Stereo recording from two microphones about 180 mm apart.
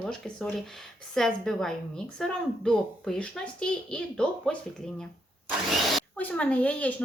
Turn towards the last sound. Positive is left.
turn(degrees=10)  # may be behind; listen again after turning